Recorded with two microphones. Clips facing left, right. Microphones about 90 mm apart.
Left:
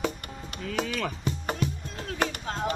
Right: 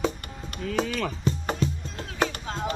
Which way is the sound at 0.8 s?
Centre (ahead or behind).